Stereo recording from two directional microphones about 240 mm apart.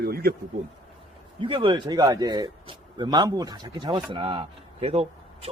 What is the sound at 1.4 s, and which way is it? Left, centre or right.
A man's voice, right.